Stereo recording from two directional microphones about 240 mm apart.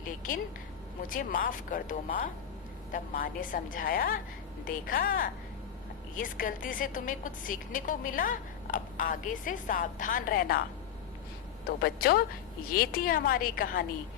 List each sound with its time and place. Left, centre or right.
0.0 s a woman's voice: left
11.6 s a woman's voice: left